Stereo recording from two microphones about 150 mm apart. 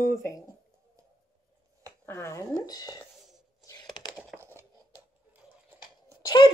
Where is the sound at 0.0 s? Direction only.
20° left (ahead or behind).